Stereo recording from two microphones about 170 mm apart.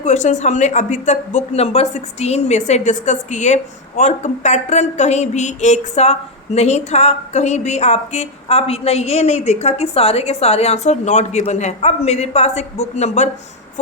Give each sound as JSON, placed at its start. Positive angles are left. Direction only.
{"t": 0.0, "sound": "speech", "side_deg": 45}